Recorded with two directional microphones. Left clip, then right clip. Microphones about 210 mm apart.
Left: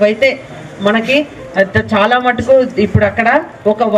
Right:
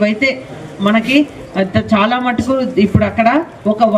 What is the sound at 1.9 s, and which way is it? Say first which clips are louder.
A woman's voice: left 3 dB; 50° right (ahead or behind).